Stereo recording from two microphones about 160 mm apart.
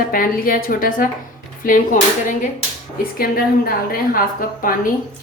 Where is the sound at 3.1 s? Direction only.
65° left (ahead or behind).